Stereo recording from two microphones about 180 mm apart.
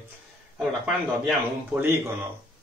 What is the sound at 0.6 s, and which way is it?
Speech, 5° right (ahead or behind).